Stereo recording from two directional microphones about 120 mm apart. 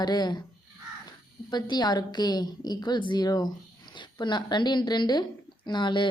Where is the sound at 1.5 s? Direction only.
35° left (ahead or behind).